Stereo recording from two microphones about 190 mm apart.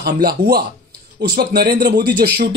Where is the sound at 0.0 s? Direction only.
55° right (ahead or behind).